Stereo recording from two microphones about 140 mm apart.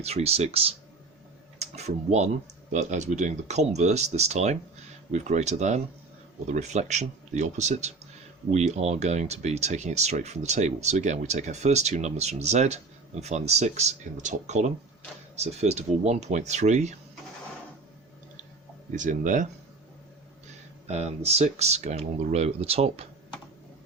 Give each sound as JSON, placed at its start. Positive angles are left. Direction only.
{"t": 0.0, "sound": "speech", "side_deg": -50}
{"t": 1.5, "sound": "a sound", "side_deg": -50}
{"t": 2.7, "sound": "speech", "side_deg": -60}
{"t": 18.9, "sound": "speech", "side_deg": -65}
{"t": 20.8, "sound": "speech", "side_deg": -50}